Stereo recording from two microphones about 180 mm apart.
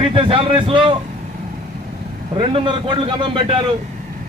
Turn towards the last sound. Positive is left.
turn(degrees=-30)  # may be behind; listen again after turning